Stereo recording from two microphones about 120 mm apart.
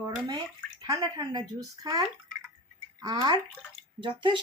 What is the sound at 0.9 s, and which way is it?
Speech, 30° right (ahead or behind).